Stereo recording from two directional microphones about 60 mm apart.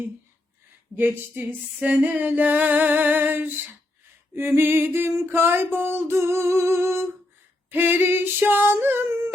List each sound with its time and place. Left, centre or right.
0.9 s female singing: right
1.8 s a sound: right
7.7 s female singing: right